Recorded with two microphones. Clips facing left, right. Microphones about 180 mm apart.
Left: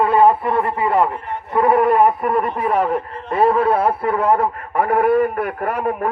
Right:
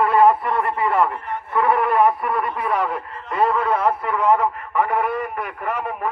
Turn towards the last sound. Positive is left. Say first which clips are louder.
# left 5 dB
turn(degrees=60)  # may be behind; listen again after turning